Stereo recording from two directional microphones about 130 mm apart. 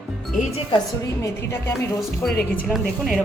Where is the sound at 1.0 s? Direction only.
25° left (ahead or behind).